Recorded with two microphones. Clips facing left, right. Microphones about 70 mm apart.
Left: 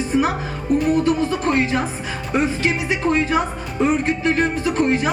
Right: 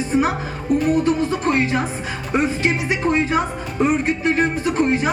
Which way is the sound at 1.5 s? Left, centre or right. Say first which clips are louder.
Even; centre.